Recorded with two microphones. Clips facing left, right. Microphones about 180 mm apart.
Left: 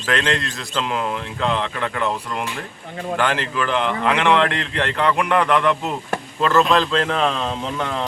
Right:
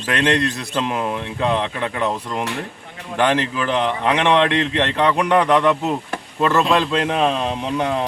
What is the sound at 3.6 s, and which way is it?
Speech, 20° right (ahead or behind).